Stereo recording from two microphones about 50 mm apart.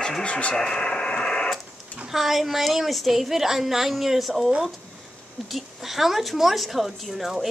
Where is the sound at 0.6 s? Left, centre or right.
Centre.